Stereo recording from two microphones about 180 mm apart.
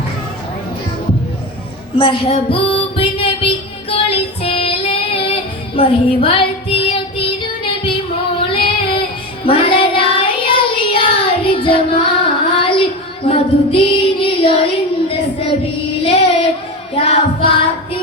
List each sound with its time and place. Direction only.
2.0 s music: 30° left (ahead or behind)
4.4 s child singing: 30° left (ahead or behind)
13.2 s female singing: 30° left (ahead or behind)
16.0 s child singing: 30° left (ahead or behind)
16.9 s music: 30° left (ahead or behind)